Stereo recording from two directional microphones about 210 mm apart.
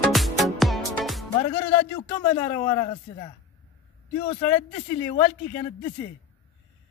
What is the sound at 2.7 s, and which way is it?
Speech, 25° left (ahead or behind).